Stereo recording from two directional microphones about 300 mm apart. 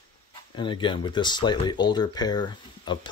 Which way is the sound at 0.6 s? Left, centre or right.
Centre.